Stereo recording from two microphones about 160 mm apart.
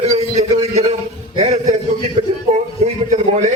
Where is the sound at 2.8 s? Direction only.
45° right (ahead or behind).